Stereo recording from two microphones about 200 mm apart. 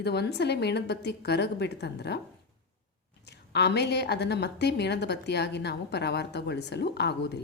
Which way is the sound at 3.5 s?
55° left (ahead or behind).